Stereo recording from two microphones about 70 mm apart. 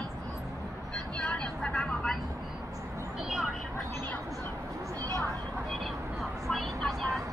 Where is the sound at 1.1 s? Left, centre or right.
Centre.